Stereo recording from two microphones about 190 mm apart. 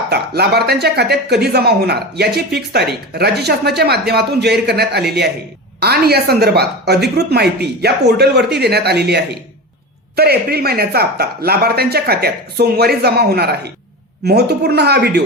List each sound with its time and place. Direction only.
0.1 s speech: 60° right (ahead or behind)